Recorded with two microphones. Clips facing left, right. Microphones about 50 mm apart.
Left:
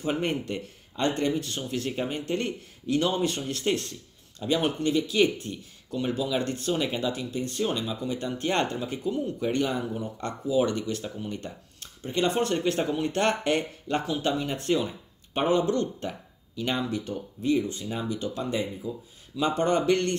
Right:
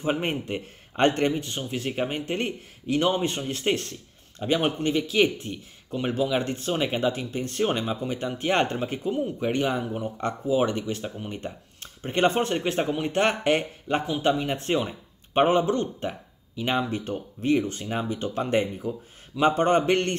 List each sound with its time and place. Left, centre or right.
0.0 s speech: right
0.9 s speech: right
1.4 s speech: right
12.0 s speech: right
12.4 s speech: right
16.9 s speech: right
19.3 s speech: right